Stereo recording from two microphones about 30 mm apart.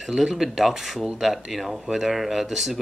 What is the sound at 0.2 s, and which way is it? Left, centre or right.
Speech, centre.